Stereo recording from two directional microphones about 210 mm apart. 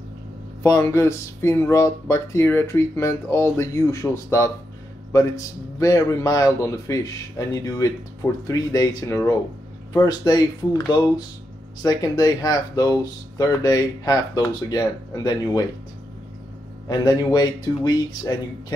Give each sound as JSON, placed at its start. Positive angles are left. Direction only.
{"t": 0.6, "sound": "a man's voice", "side_deg": 15}
{"t": 16.8, "sound": "a man's voice", "side_deg": 20}